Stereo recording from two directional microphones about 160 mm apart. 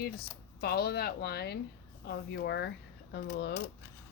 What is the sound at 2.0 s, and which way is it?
Speech, 90° left.